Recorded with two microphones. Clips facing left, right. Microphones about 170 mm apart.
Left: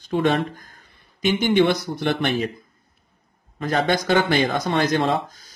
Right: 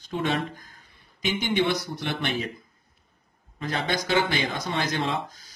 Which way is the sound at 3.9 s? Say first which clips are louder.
Left 4 dB; 55° left (ahead or behind).